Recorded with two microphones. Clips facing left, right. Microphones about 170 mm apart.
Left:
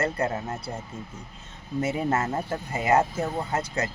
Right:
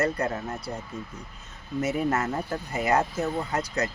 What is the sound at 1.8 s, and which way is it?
Speech, 30° left (ahead or behind).